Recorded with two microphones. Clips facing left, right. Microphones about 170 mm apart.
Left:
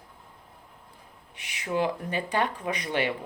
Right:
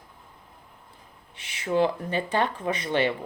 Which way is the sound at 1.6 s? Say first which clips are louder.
Right 4 dB; 25° right (ahead or behind).